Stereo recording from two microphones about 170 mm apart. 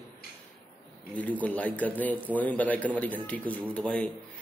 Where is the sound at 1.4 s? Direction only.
10° left (ahead or behind).